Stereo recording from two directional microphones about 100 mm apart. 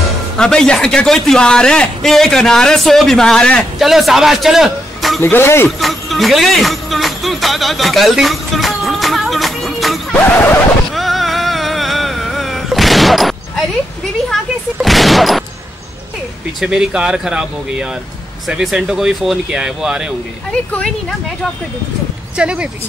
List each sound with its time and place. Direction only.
0.4 s a man's voice: 5° left (ahead or behind)
5.2 s speech: 25° left (ahead or behind)
5.8 s speech: centre (ahead or behind)
10.1 s a sound: 15° left (ahead or behind)
10.9 s vehicle: centre (ahead or behind)
14.3 s speech: centre (ahead or behind)
16.5 s speech: 5° right (ahead or behind)
20.7 s speech: 5° left (ahead or behind)
22.4 s speech: 10° right (ahead or behind)